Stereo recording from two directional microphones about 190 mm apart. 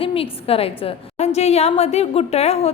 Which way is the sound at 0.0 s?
30° left (ahead or behind).